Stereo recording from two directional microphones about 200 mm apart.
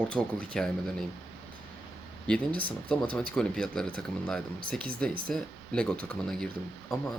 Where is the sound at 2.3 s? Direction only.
5° left (ahead or behind).